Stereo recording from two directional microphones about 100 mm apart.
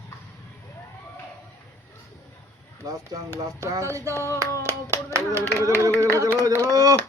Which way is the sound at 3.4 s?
35° right (ahead or behind).